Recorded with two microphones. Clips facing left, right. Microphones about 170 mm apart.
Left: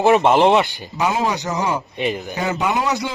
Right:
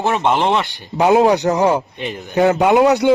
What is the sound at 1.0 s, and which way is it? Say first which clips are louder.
A man's voice: right 8 dB; 60° right (ahead or behind).